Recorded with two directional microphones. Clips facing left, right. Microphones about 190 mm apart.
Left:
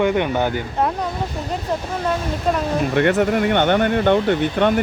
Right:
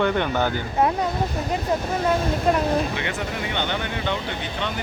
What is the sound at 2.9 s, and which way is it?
Speech, 55° left (ahead or behind).